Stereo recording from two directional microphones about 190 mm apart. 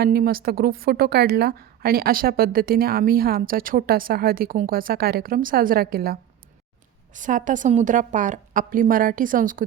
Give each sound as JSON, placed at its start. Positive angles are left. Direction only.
{"t": 0.0, "sound": "a woman's voice", "side_deg": -50}
{"t": 7.1, "sound": "a woman's voice", "side_deg": -40}